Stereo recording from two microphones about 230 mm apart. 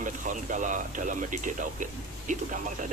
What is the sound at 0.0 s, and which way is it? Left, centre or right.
Speech, right.